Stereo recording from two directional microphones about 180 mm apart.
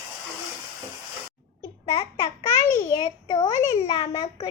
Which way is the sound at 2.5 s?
20° left (ahead or behind).